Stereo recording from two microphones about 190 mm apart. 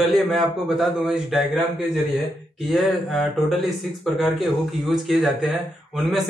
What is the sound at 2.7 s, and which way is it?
Speech, centre (ahead or behind).